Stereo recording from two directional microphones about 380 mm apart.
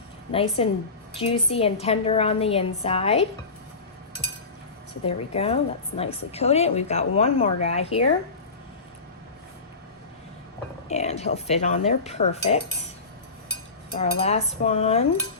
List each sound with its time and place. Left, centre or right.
0.3 s a woman's voice: centre
5.0 s a woman's voice: centre
10.8 s a woman's voice: centre
14.0 s a woman's voice: centre